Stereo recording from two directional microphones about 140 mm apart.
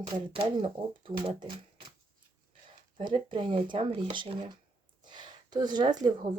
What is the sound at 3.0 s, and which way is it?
Speech, 35° right (ahead or behind).